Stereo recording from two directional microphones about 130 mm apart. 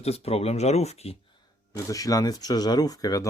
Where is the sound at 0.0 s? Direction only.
50° left (ahead or behind).